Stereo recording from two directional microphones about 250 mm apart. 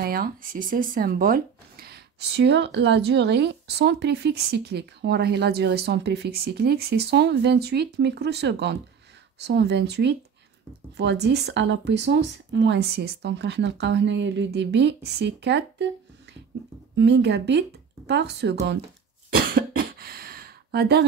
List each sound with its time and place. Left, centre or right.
0.0 s speech: right
16.9 s speech: right
19.3 s cough: right